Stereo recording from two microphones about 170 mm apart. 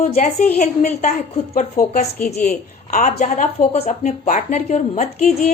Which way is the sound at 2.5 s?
55° left (ahead or behind).